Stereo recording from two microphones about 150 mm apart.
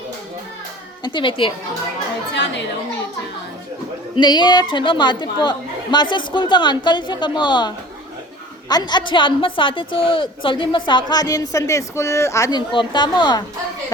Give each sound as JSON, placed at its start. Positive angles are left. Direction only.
{"t": 1.0, "sound": "a woman's voice", "side_deg": 30}
{"t": 4.1, "sound": "a woman's voice", "side_deg": 30}
{"t": 8.7, "sound": "a woman's voice", "side_deg": 30}